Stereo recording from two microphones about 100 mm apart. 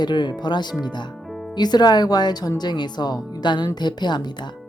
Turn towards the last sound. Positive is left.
turn(degrees=45)  # may be behind; listen again after turning